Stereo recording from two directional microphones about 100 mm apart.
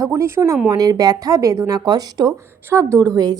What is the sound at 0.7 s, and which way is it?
A woman's voice, 40° right (ahead or behind).